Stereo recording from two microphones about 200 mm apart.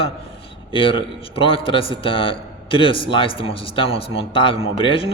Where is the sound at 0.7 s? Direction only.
25° left (ahead or behind).